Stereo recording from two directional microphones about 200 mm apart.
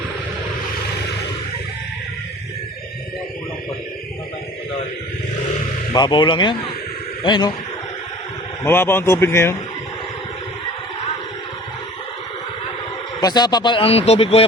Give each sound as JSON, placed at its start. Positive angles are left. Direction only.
{"t": 5.9, "sound": "speech", "side_deg": 20}
{"t": 8.6, "sound": "speech", "side_deg": 10}
{"t": 13.1, "sound": "speech", "side_deg": 20}